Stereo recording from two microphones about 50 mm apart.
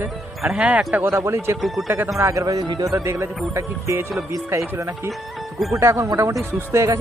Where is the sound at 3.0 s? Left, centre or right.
Right.